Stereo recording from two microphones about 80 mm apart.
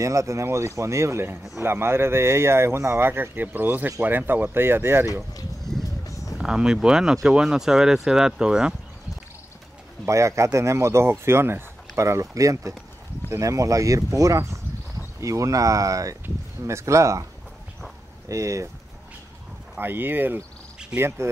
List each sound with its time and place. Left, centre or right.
0.0 s speech: right
5.7 s music: left
6.0 s a sound: left
6.3 s speech: centre
10.0 s speech: right
18.3 s speech: right
19.8 s speech: right